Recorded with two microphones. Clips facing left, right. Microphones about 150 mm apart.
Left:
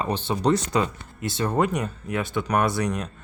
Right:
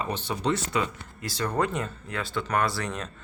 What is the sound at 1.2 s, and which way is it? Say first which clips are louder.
Speech: left 4 dB; 25° left (ahead or behind).